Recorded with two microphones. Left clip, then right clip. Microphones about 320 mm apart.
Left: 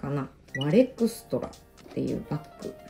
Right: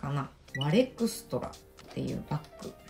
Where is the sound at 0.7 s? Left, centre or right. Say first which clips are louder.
Left 5 dB; centre.